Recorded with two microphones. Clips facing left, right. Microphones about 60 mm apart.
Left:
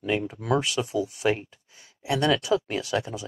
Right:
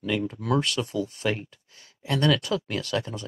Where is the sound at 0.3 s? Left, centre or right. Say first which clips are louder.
Even; centre.